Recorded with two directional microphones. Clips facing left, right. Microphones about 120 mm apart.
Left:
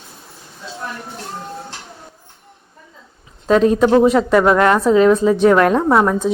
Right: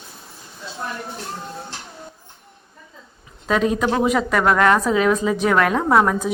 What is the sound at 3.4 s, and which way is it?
Speech, 35° left (ahead or behind).